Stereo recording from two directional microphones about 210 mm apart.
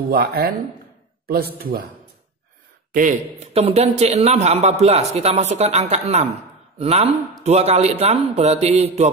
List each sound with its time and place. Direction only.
0.1 s a man's voice: 45° right (ahead or behind)
2.9 s speech: 40° right (ahead or behind)